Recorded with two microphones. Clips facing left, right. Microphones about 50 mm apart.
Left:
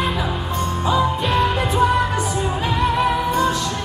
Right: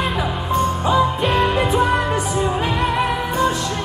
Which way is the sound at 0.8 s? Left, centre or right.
Right.